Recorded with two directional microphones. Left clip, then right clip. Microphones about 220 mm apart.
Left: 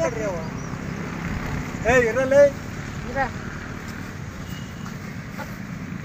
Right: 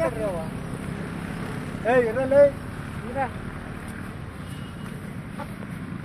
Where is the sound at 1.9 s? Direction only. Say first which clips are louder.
Left 2 dB; 25° left (ahead or behind).